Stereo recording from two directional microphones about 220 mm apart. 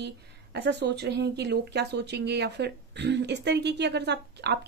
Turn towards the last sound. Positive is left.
turn(degrees=-50)  # may be behind; listen again after turning